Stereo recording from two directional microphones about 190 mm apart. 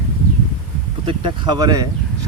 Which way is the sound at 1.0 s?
20° right (ahead or behind).